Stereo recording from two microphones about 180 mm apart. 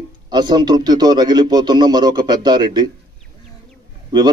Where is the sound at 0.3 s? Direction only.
25° right (ahead or behind).